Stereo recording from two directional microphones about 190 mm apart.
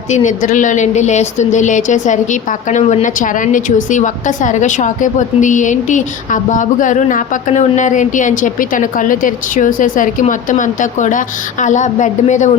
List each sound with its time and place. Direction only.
0.1 s a woman's voice: 40° left (ahead or behind)